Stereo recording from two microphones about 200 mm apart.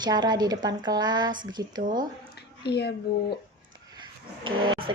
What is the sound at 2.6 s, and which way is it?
Speech, 55° left (ahead or behind).